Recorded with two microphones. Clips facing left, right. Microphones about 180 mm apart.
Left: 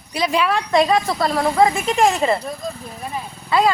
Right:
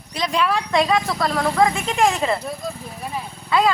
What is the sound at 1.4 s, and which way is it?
Speech, 20° left (ahead or behind).